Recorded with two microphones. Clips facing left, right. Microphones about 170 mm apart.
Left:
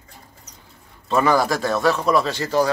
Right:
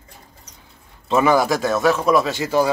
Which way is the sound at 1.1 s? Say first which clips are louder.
Right 2 dB; 20° right (ahead or behind).